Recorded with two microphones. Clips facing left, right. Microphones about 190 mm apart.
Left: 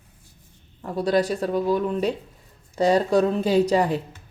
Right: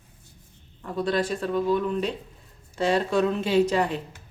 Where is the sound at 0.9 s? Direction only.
40° left (ahead or behind).